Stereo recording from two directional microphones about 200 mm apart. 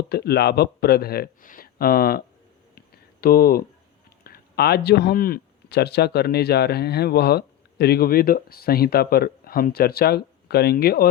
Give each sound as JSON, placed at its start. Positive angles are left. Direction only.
{"t": 0.1, "sound": "speech", "side_deg": 55}
{"t": 2.7, "sound": "a sound", "side_deg": 50}
{"t": 4.2, "sound": "speech", "side_deg": 50}